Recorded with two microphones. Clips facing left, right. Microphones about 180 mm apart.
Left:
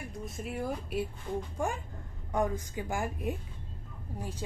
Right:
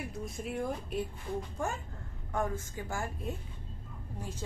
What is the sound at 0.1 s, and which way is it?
A woman's voice, centre (ahead or behind).